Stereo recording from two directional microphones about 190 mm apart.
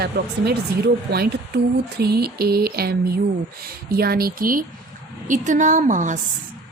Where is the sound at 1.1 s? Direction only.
55° right (ahead or behind); by 6.1 s 40° right (ahead or behind).